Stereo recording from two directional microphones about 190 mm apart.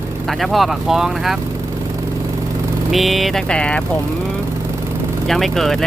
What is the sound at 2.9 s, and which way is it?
Speech, centre (ahead or behind).